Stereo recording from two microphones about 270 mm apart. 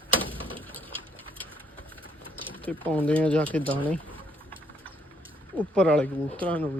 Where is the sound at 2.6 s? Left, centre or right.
Centre.